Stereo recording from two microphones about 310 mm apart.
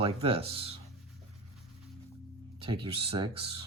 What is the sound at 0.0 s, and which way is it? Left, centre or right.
Speech, centre.